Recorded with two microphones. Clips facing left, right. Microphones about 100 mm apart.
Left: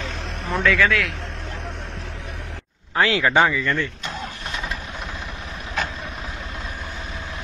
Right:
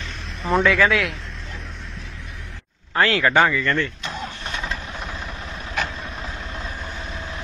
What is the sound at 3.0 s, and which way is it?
Speech, 10° left (ahead or behind).